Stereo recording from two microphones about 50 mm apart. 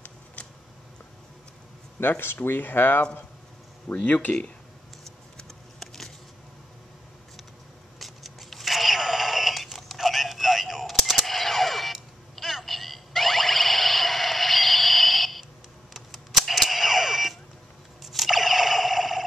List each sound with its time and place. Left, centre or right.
0.4 s tick: left
2.0 s speech: left
3.9 s speech: left
5.4 s a sound: centre
8.0 s a sound: centre
18.0 s crunch: centre